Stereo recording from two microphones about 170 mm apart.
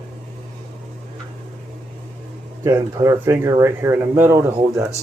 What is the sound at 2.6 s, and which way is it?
Speech, 15° right (ahead or behind).